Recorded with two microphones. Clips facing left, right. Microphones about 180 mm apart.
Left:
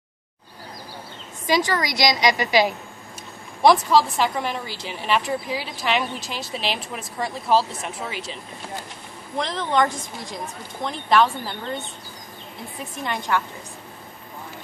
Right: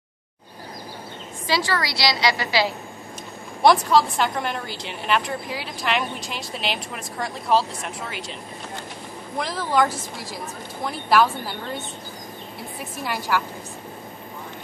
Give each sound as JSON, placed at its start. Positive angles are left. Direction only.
{"t": 1.5, "sound": "a woman's voice", "side_deg": 15}
{"t": 3.6, "sound": "a woman's voice", "side_deg": 0}
{"t": 9.4, "sound": "a woman's voice", "side_deg": -5}
{"t": 13.0, "sound": "a woman's voice", "side_deg": -5}